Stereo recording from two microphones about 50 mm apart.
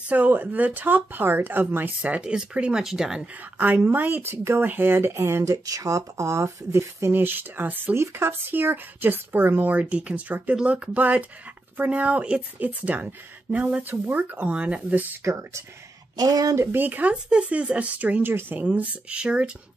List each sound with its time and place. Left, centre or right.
0.1 s speech: right
2.0 s speech: right
2.8 s speech: centre
3.5 s speech: right
4.3 s speech: right
7.1 s a woman's voice: right
7.9 s a woman's voice: right
13.8 s a woman's voice: right
14.3 s speech: right
15.2 s speech: right
16.7 s speech: right
17.1 s speech: right
18.2 s a woman's voice: right
18.6 s speech: right